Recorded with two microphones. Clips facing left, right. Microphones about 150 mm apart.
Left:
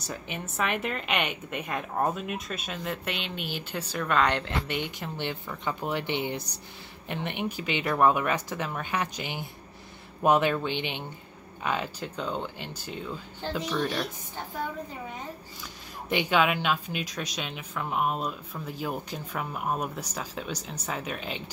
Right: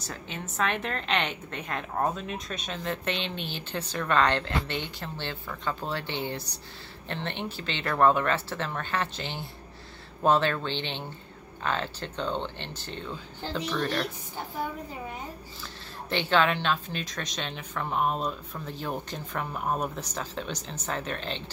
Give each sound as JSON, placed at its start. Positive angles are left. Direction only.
{"t": 0.1, "sound": "a woman's voice", "side_deg": 10}
{"t": 16.1, "sound": "a woman's voice", "side_deg": 10}